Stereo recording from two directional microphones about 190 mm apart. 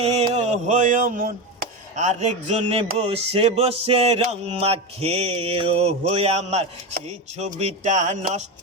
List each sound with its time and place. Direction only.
0.0 s chop: 35° right (ahead or behind)